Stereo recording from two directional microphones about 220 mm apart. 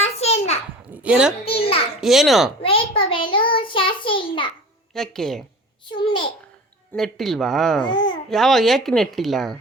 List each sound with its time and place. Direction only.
0.0 s a sound: 30° left (ahead or behind)
1.0 s a woman's voice: 5° right (ahead or behind)
1.5 s a sound: 25° left (ahead or behind)
2.0 s speech: centre (ahead or behind)
2.6 s child singing: 25° left (ahead or behind)
4.9 s speech: centre (ahead or behind)
6.0 s babbling: 20° left (ahead or behind)
6.9 s speech: centre (ahead or behind)
7.9 s speech: 20° left (ahead or behind)
8.3 s speech: centre (ahead or behind)